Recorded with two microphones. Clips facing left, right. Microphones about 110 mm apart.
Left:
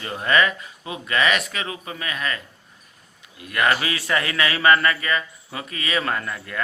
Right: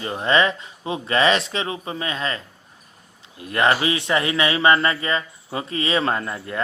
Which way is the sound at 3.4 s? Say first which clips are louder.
Right 3 dB; 30° right (ahead or behind).